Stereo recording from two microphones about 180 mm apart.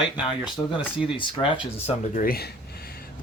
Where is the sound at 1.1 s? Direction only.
30° left (ahead or behind).